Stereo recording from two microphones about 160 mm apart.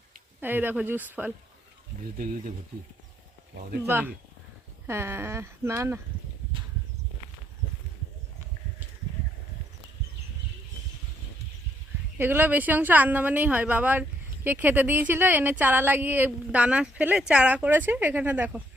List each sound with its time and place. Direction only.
0.3 s speech: 10° right (ahead or behind)
3.8 s speech: 15° right (ahead or behind)
12.1 s speech: 15° right (ahead or behind)